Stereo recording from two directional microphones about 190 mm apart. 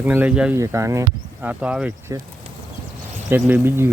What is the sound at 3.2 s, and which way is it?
Speech, 10° right (ahead or behind).